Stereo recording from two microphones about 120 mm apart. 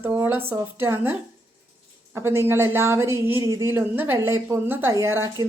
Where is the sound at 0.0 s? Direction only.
15° right (ahead or behind).